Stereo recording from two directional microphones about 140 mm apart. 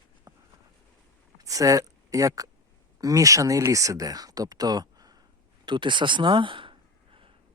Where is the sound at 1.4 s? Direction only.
25° right (ahead or behind).